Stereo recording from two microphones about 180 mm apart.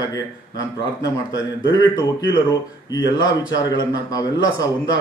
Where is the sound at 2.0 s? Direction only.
20° left (ahead or behind).